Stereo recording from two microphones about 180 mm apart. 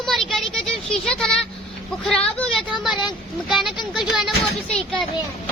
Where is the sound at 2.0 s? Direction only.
5° left (ahead or behind).